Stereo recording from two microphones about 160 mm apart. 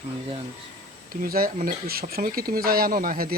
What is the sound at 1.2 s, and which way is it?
Speech, 65° right (ahead or behind).